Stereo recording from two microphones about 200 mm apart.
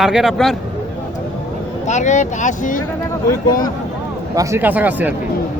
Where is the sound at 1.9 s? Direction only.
35° left (ahead or behind).